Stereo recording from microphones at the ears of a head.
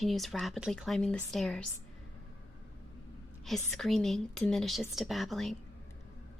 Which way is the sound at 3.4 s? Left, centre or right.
Centre.